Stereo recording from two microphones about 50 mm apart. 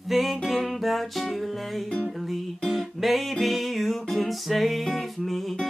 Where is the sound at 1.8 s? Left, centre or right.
Left.